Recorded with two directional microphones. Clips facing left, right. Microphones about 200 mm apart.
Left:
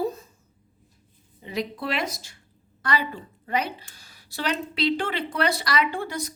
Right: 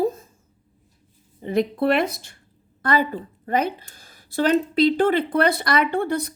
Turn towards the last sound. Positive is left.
turn(degrees=-60)  # may be behind; listen again after turning